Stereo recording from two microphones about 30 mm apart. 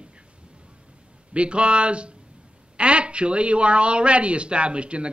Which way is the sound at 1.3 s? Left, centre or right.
Right.